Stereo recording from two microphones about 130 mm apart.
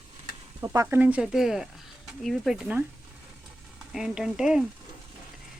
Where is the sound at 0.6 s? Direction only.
25° right (ahead or behind).